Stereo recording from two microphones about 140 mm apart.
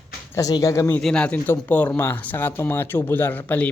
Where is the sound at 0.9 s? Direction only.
5° left (ahead or behind).